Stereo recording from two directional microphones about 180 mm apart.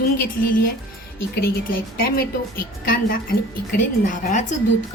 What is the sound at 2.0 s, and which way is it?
A woman's voice, 60° left (ahead or behind).